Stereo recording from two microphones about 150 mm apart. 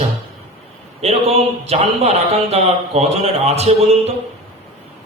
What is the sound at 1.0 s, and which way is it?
Speech, 45° right (ahead or behind).